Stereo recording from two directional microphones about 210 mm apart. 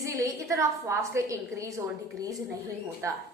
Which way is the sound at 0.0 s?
15° right (ahead or behind).